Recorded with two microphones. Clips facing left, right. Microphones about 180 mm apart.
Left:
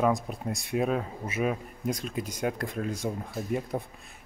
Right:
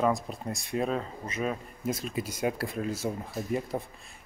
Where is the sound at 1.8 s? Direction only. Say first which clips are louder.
Right 2 dB; 5° right (ahead or behind).